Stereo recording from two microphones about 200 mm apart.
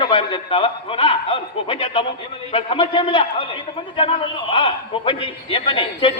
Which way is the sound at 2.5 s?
30° left (ahead or behind).